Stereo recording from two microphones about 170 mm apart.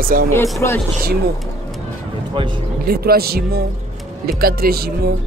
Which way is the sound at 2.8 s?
65° right (ahead or behind).